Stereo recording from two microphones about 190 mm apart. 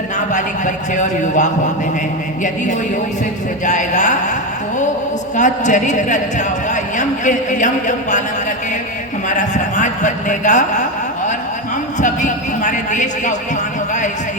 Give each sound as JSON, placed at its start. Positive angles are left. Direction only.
{"t": 0.3, "sound": "a man's voice", "side_deg": 40}
{"t": 3.7, "sound": "a man's voice", "side_deg": 40}
{"t": 5.4, "sound": "a man's voice", "side_deg": 40}
{"t": 9.3, "sound": "a man's voice", "side_deg": 40}
{"t": 11.9, "sound": "a man's voice", "side_deg": 40}